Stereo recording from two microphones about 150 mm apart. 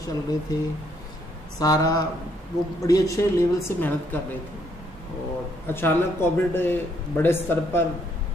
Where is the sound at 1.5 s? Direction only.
25° left (ahead or behind).